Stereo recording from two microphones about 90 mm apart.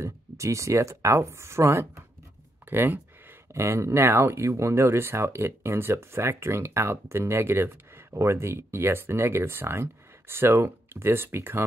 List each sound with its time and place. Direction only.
0.0 s speech: 35° right (ahead or behind)